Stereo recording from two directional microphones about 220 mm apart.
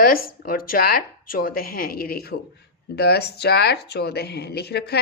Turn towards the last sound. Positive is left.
turn(degrees=50)  # may be behind; listen again after turning